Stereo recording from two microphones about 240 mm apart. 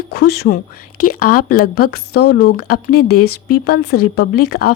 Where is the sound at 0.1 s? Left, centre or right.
Left.